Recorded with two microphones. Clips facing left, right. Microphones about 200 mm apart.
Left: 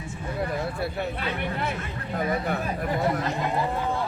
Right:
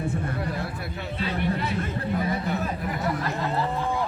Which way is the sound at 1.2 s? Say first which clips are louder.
Right 2 dB; 55° left (ahead or behind).